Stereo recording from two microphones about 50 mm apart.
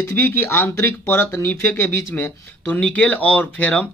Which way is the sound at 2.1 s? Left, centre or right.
Left.